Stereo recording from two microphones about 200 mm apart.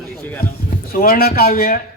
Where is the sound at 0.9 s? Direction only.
45° left (ahead or behind).